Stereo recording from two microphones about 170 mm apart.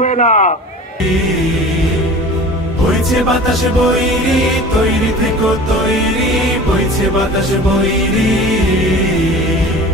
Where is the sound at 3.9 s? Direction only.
Centre (ahead or behind).